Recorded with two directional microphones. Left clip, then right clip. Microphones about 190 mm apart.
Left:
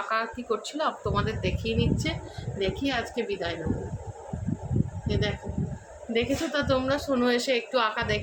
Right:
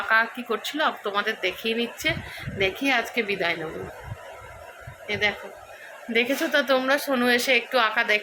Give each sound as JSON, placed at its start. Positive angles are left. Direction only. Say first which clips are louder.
{"t": 0.1, "sound": "a woman's voice", "louder": "right 7 dB", "side_deg": 0}
{"t": 5.0, "sound": "speech", "louder": "right 7 dB", "side_deg": -15}
{"t": 6.1, "sound": "a woman's voice", "louder": "right 5 dB", "side_deg": 0}